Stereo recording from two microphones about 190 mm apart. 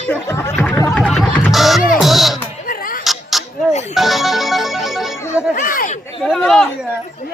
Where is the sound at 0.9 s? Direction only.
5° left (ahead or behind).